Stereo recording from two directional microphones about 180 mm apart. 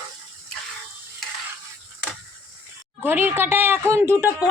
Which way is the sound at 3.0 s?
10° right (ahead or behind).